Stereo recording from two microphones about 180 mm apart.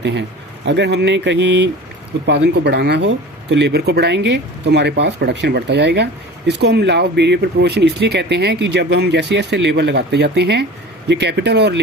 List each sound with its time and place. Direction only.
0.0 s speech: 75° right (ahead or behind)